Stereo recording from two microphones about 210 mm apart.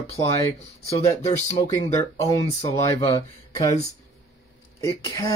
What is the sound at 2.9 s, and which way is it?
Speech, 25° left (ahead or behind).